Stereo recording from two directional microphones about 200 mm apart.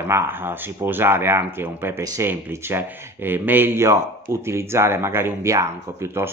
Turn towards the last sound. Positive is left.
turn(degrees=-15)  # may be behind; listen again after turning